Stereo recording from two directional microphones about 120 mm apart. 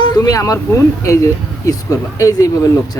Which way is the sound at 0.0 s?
30° left (ahead or behind).